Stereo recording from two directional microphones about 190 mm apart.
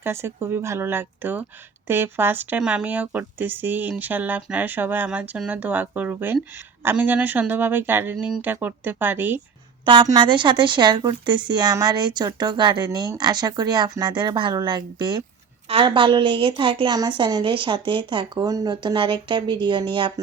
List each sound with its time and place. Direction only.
0.0 s speech: 15° right (ahead or behind)
9.8 s speech: 25° right (ahead or behind)